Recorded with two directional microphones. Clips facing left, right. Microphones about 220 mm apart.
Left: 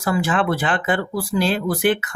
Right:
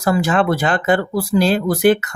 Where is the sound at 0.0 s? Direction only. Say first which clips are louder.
Right 4 dB; 40° right (ahead or behind).